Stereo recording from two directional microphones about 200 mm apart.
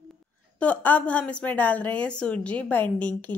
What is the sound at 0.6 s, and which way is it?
A woman's voice, 5° left (ahead or behind).